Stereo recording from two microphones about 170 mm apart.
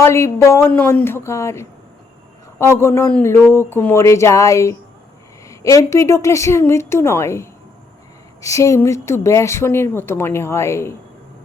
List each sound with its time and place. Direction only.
0.0 s speech: 15° left (ahead or behind)